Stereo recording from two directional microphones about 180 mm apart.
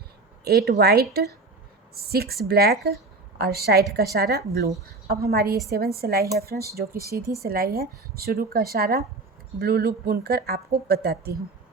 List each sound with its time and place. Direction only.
0.4 s speech: 60° right (ahead or behind)